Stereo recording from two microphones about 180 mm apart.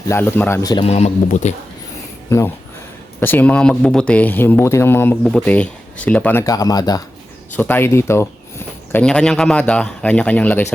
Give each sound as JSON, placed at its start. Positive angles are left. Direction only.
{"t": 0.1, "sound": "speech", "side_deg": 10}
{"t": 0.9, "sound": "a man's voice", "side_deg": 35}
{"t": 3.2, "sound": "speech", "side_deg": 10}
{"t": 7.5, "sound": "a man's voice", "side_deg": 10}